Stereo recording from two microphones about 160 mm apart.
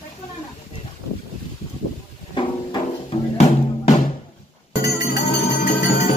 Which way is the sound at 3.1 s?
45° left (ahead or behind).